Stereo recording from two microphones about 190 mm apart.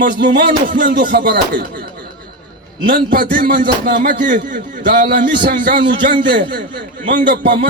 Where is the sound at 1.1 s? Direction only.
50° right (ahead or behind).